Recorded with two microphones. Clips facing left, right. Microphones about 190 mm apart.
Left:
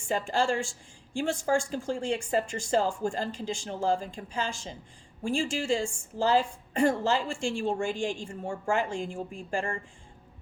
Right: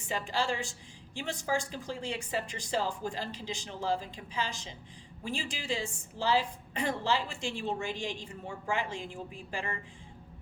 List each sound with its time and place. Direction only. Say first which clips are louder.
0.1 s a woman's voice: left 5 dB; 50° left (ahead or behind)